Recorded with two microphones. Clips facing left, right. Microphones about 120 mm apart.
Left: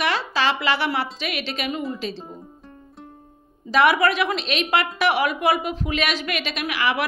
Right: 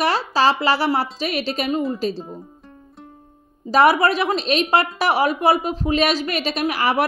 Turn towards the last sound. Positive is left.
turn(degrees=-40)  # may be behind; listen again after turning